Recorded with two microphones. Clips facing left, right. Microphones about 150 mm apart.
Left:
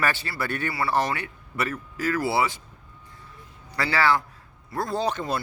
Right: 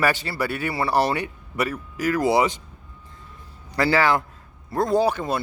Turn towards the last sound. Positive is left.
turn(degrees=-10)  # may be behind; listen again after turning